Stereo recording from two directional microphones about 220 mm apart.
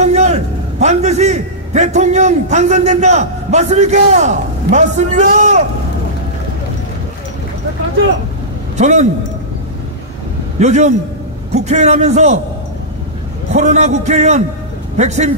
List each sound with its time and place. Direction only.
0.0 s a man's voice: 30° right (ahead or behind)
8.7 s speech: 30° right (ahead or behind)
10.6 s a man's voice: 30° right (ahead or behind)
13.5 s a man's voice: 30° right (ahead or behind)